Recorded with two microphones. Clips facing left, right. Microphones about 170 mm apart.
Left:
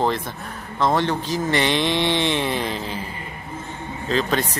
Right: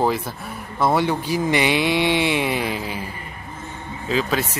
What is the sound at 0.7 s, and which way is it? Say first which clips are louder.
Speech: right 1 dB; 10° right (ahead or behind).